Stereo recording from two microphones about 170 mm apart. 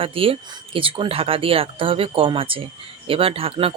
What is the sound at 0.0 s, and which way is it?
Speech, 35° right (ahead or behind).